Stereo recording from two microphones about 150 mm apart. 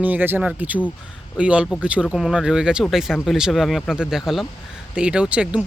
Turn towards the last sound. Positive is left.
turn(degrees=-5)  # may be behind; listen again after turning